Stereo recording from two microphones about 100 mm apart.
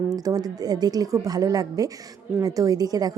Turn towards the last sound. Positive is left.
turn(degrees=-40)  # may be behind; listen again after turning